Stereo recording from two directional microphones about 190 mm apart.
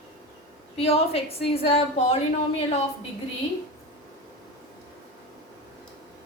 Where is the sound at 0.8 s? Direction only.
30° left (ahead or behind).